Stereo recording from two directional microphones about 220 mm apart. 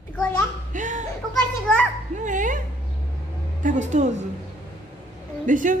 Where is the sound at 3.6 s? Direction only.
35° right (ahead or behind).